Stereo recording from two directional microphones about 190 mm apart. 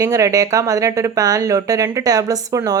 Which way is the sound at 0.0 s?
15° right (ahead or behind).